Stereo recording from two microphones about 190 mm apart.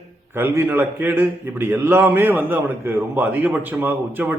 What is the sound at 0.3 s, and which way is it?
A man's voice, 10° right (ahead or behind).